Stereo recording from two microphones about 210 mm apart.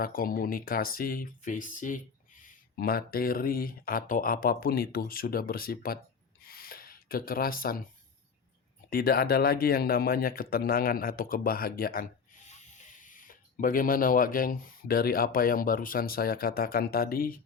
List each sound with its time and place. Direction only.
0.0 s speech: 45° left (ahead or behind)
6.4 s a sound: 45° left (ahead or behind)
8.9 s speech: 45° left (ahead or behind)